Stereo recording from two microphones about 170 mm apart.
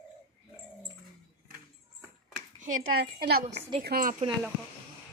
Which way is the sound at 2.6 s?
55° right (ahead or behind).